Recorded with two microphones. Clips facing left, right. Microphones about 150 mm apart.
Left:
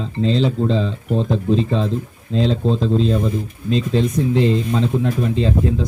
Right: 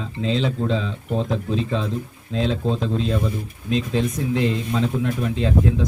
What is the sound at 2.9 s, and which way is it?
Speech, 30° left (ahead or behind).